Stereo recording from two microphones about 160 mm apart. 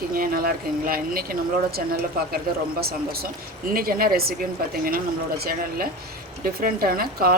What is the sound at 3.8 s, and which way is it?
Speech, 65° right (ahead or behind).